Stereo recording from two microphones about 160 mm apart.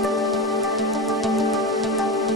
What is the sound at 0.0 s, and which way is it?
Music, centre (ahead or behind).